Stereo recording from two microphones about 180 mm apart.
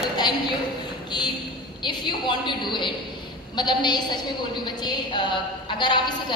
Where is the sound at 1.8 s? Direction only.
25° left (ahead or behind).